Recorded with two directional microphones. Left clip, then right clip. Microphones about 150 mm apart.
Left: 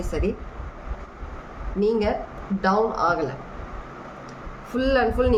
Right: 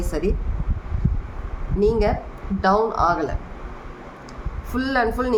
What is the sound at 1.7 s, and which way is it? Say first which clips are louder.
A woman's voice: right 2 dB; 45° right (ahead or behind).